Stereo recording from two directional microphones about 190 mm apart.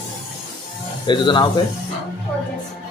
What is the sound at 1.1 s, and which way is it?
Speech, 25° left (ahead or behind).